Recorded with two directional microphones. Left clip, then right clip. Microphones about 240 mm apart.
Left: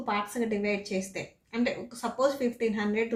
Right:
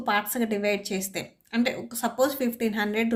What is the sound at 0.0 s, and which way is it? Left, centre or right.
A woman's voice, right.